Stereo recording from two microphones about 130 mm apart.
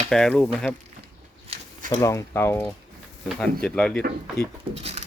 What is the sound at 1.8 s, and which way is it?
Speech, 25° left (ahead or behind).